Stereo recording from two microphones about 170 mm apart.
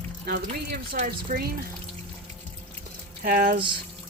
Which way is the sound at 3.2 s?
55° right (ahead or behind).